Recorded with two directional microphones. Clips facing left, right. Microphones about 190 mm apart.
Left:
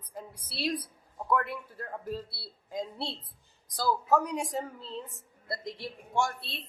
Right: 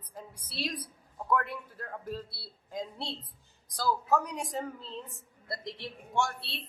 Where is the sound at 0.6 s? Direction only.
10° left (ahead or behind).